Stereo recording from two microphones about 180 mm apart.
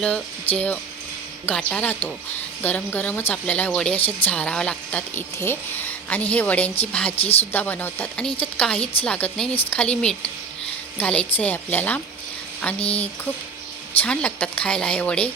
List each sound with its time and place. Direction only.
0.0 s speech: 5° left (ahead or behind)
7.2 s speech: 35° left (ahead or behind)
7.5 s speech: 10° left (ahead or behind)